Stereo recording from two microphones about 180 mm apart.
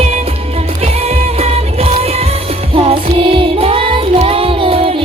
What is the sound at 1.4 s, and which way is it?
Music, 35° right (ahead or behind).